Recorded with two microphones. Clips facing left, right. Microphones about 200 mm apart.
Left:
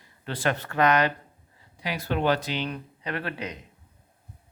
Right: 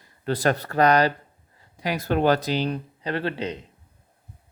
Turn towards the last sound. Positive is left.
turn(degrees=-30)  # may be behind; listen again after turning